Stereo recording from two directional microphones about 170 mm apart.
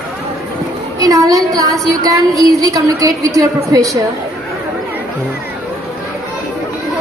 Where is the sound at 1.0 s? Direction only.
20° right (ahead or behind).